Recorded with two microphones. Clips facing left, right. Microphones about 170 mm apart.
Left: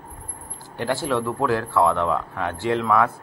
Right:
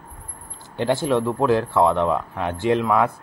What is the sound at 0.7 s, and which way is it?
A man's voice, 20° right (ahead or behind).